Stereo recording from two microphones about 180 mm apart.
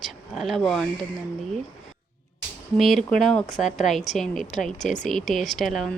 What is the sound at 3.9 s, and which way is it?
Speech, centre (ahead or behind).